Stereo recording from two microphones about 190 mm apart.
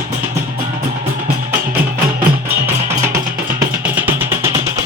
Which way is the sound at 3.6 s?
10° right (ahead or behind).